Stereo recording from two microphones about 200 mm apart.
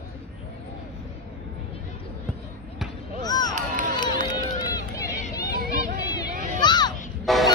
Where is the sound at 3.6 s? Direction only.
40° right (ahead or behind).